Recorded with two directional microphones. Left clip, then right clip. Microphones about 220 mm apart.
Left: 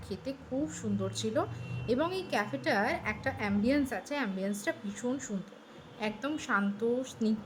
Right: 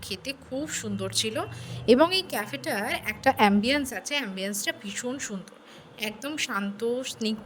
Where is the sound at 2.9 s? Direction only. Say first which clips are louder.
Right 8 dB; 40° right (ahead or behind).